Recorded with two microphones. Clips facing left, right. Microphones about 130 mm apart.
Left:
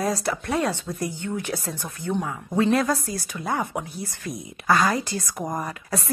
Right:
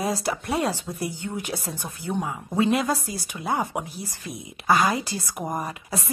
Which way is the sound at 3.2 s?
20° right (ahead or behind).